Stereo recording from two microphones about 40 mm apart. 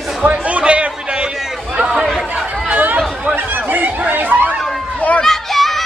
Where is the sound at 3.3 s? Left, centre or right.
Right.